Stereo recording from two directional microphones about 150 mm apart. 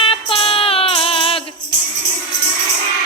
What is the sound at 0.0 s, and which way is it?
Music, 35° left (ahead or behind).